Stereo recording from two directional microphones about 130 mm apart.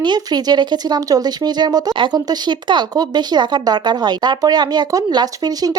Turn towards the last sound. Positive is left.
turn(degrees=-30)  # may be behind; listen again after turning